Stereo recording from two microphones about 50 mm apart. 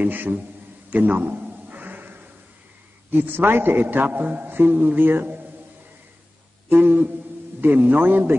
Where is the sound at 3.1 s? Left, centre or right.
Right.